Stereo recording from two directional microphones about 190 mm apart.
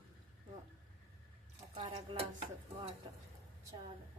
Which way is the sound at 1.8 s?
30° right (ahead or behind).